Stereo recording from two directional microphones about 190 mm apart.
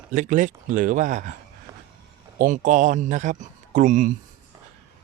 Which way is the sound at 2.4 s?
45° right (ahead or behind).